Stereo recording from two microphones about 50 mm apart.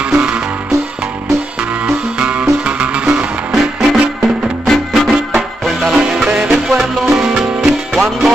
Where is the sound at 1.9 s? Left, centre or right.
Right.